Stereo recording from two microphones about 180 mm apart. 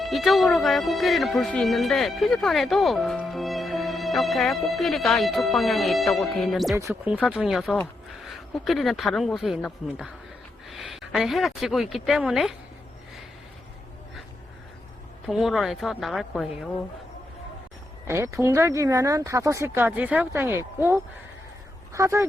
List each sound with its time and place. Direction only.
0.0 s speech: centre (ahead or behind)
6.7 s speech: 15° right (ahead or behind)
7.3 s a woman's voice: 5° right (ahead or behind)
15.3 s speech: centre (ahead or behind)
18.1 s speech: 15° right (ahead or behind)